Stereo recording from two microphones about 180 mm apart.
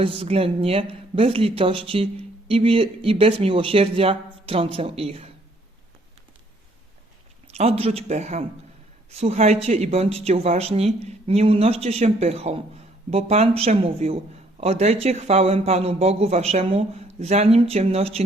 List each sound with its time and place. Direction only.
0.0 s speech: 35° right (ahead or behind)
7.4 s speech: 35° right (ahead or behind)